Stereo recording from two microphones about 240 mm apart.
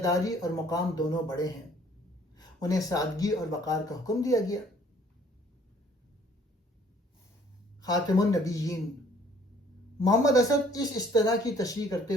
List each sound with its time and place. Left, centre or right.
0.0 s speech: centre
7.8 s speech: centre
10.0 s speech: centre